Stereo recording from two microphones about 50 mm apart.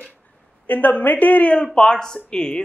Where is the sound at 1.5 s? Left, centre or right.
Centre.